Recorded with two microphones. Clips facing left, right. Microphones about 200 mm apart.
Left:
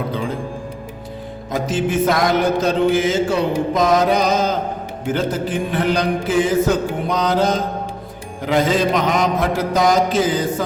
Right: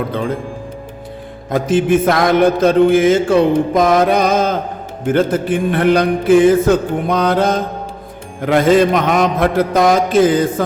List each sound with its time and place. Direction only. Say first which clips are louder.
1.5 s mantra: right 7 dB; 55° right (ahead or behind)